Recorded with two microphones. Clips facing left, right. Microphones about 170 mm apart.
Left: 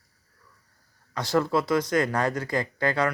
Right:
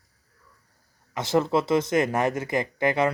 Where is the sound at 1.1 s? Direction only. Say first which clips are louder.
Right 1 dB; 20° right (ahead or behind).